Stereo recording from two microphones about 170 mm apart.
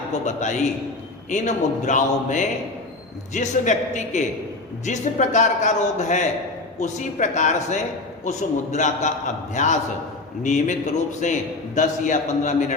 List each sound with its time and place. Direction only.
0.1 s a man's voice: 45° left (ahead or behind)